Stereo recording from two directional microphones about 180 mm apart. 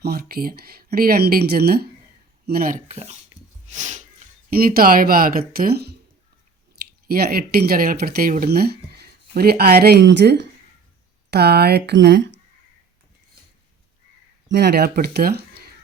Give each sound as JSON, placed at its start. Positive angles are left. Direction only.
{"t": 0.0, "sound": "speech", "side_deg": -60}
{"t": 2.8, "sound": "speech", "side_deg": -35}
{"t": 3.7, "sound": "a sound", "side_deg": -40}
{"t": 4.4, "sound": "speech", "side_deg": -55}
{"t": 7.1, "sound": "speech", "side_deg": -60}
{"t": 14.4, "sound": "speech", "side_deg": -70}